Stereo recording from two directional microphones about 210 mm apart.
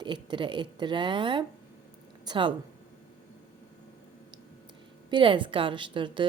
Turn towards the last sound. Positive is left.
turn(degrees=-25)  # may be behind; listen again after turning